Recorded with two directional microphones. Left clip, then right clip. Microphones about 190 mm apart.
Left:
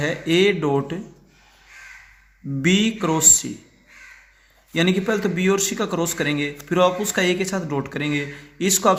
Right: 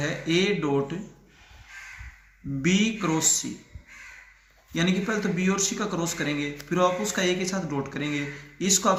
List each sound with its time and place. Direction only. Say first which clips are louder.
0.0 s speech: left 7 dB; 50° left (ahead or behind)
2.6 s speech: left 5 dB; 50° left (ahead or behind)
4.7 s speech: left 6 dB; 45° left (ahead or behind)